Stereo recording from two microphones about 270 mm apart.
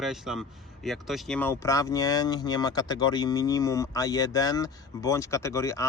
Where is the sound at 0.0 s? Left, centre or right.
Centre.